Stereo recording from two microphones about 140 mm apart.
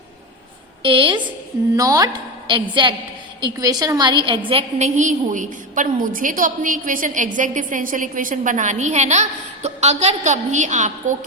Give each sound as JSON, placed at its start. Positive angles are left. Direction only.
{"t": 0.8, "sound": "a woman's voice", "side_deg": -40}
{"t": 1.7, "sound": "a woman's voice", "side_deg": -25}
{"t": 2.5, "sound": "a woman's voice", "side_deg": -35}
{"t": 4.8, "sound": "a woman's voice", "side_deg": -60}